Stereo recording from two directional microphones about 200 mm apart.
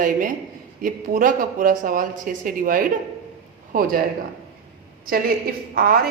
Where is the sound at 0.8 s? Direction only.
45° right (ahead or behind).